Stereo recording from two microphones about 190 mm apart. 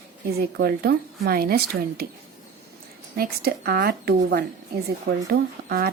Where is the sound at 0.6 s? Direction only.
55° right (ahead or behind).